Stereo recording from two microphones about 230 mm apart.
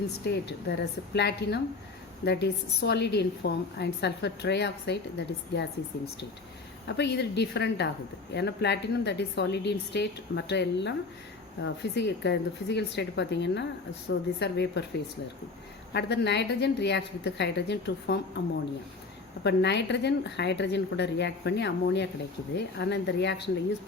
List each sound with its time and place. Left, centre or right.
0.3 s a woman's voice: left
6.8 s a woman's voice: left
15.9 s a woman's voice: left